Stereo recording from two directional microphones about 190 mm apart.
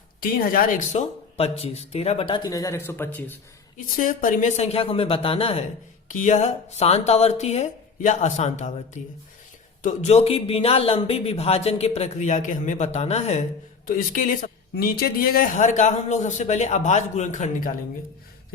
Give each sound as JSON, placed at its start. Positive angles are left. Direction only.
{"t": 0.2, "sound": "speech", "side_deg": 50}
{"t": 3.9, "sound": "speech", "side_deg": 45}
{"t": 9.8, "sound": "speech", "side_deg": 35}
{"t": 13.8, "sound": "speech", "side_deg": 45}